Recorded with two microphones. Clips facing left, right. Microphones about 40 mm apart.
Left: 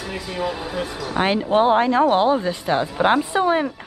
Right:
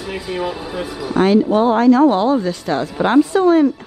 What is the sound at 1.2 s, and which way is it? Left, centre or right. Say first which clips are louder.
Speech: right 4 dB; left.